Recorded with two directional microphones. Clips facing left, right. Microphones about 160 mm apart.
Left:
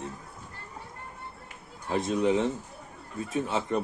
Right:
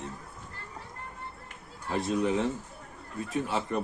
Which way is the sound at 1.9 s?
20° left (ahead or behind).